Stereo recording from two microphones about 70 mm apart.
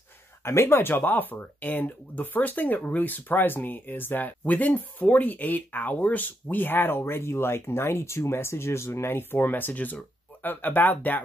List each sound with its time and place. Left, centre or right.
0.4 s speech: left